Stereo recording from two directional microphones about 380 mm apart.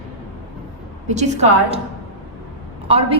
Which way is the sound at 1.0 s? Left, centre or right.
Centre.